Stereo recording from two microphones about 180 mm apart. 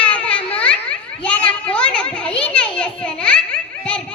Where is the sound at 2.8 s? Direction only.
5° left (ahead or behind).